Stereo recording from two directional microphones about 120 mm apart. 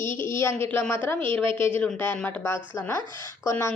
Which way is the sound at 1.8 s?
10° left (ahead or behind).